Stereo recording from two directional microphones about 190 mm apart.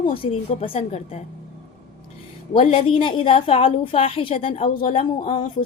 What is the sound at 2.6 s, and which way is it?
A woman's voice, 30° left (ahead or behind).